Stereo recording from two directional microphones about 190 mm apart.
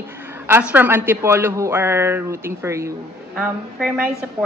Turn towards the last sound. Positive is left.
turn(degrees=-5)  # may be behind; listen again after turning